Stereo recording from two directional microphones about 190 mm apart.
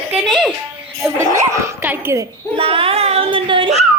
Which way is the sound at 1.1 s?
15° right (ahead or behind).